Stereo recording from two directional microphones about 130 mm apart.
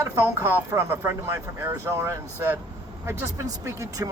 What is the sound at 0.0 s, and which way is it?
Speech, 20° right (ahead or behind).